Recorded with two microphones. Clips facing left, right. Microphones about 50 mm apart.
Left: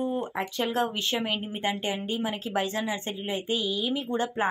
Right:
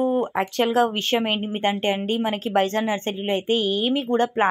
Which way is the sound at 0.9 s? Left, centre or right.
Right.